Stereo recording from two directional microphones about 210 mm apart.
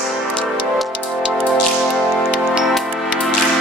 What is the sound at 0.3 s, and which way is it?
Music, centre (ahead or behind).